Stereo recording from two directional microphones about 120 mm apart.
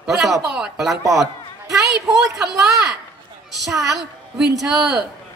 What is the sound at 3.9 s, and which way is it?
A woman's voice, 5° right (ahead or behind).